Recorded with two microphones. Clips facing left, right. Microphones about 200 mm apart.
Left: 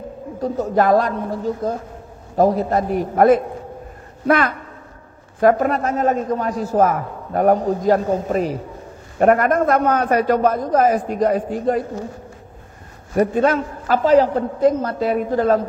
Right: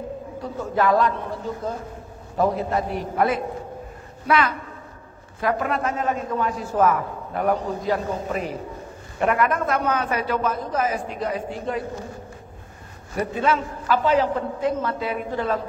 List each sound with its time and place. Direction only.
0.4 s a man's voice: 40° left (ahead or behind)
13.1 s a man's voice: 45° left (ahead or behind)